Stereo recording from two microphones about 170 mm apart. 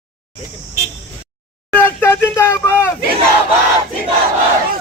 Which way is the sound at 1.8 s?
15° left (ahead or behind).